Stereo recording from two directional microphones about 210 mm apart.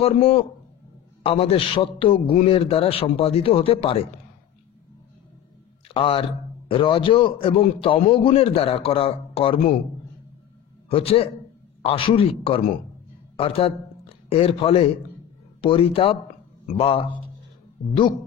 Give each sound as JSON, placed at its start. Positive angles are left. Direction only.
{"t": 0.0, "sound": "a man's voice", "side_deg": 25}
{"t": 5.9, "sound": "a man's voice", "side_deg": 25}
{"t": 10.9, "sound": "a man's voice", "side_deg": 25}